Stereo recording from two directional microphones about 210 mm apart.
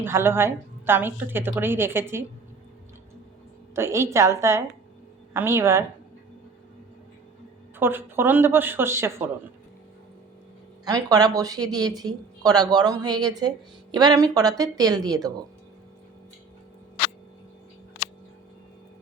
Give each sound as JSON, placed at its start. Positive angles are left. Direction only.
{"t": 0.0, "sound": "a woman's voice", "side_deg": -10}
{"t": 3.8, "sound": "a woman's voice", "side_deg": -15}
{"t": 7.8, "sound": "a woman's voice", "side_deg": -10}
{"t": 10.8, "sound": "a woman's voice", "side_deg": -15}